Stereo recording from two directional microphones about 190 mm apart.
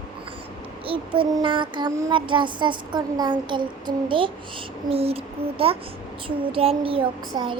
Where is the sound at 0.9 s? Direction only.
25° right (ahead or behind).